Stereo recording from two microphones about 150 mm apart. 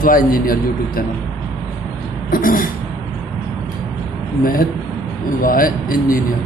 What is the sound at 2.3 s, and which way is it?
Speech, 70° left (ahead or behind).